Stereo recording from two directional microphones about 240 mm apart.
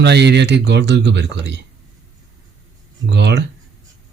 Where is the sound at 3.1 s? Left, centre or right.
Right.